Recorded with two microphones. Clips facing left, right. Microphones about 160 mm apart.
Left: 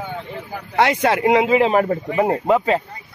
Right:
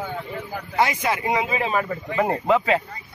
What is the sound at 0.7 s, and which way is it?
Speech, 70° left (ahead or behind).